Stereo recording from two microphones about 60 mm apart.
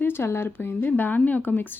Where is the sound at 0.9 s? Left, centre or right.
Left.